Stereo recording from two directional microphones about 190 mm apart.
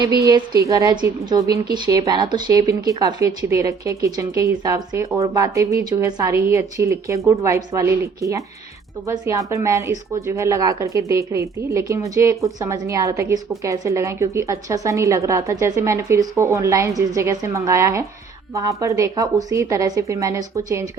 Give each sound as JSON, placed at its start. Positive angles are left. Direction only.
{"t": 0.2, "sound": "a woman's voice", "side_deg": -15}